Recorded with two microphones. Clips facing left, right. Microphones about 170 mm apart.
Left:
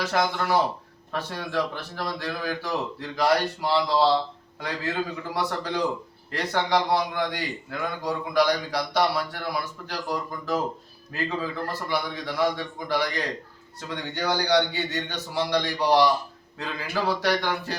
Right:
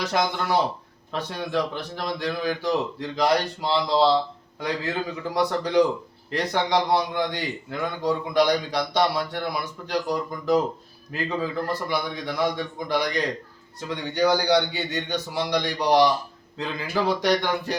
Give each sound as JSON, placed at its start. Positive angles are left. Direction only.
{"t": 0.0, "sound": "a man's voice", "side_deg": -15}
{"t": 5.3, "sound": "a man's voice", "side_deg": -15}